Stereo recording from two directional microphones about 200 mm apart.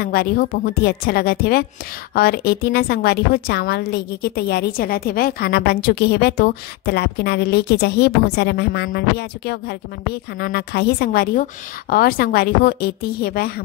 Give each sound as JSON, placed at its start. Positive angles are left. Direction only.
{"t": 0.0, "sound": "a woman's voice", "side_deg": 50}